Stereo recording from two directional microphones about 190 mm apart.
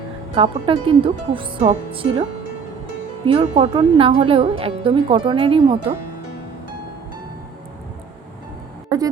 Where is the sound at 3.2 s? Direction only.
25° right (ahead or behind).